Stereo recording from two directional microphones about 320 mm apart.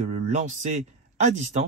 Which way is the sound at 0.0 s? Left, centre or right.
Right.